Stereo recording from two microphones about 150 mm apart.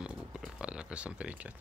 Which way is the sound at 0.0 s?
5° right (ahead or behind).